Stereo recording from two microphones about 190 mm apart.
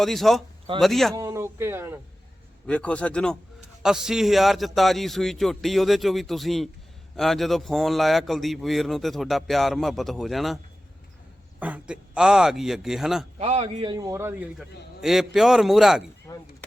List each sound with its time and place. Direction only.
0.0 s a man's voice: centre (ahead or behind)
1.1 s speech: 15° right (ahead or behind)
2.6 s a man's voice: 5° left (ahead or behind)
11.6 s a man's voice: 5° right (ahead or behind)
13.4 s a man's voice: 35° right (ahead or behind)
13.9 s a man's voice: 15° right (ahead or behind)
16.2 s a sound: 15° left (ahead or behind)